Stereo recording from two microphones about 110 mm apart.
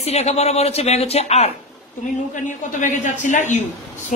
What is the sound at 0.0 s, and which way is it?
A woman's voice, 80° left.